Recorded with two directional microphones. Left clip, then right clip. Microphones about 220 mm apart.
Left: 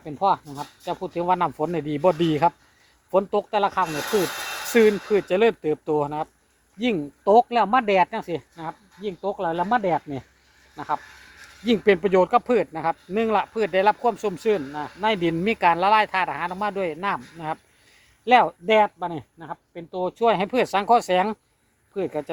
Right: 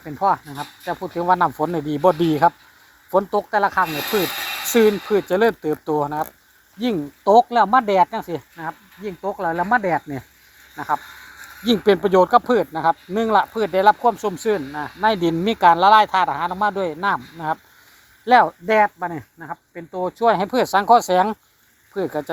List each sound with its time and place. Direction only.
0.4 s speech: 10° right (ahead or behind)
3.8 s speech: 25° left (ahead or behind)
4.7 s speech: 10° right (ahead or behind)
10.8 s speech: 20° right (ahead or behind)
15.0 s speech: 20° right (ahead or behind)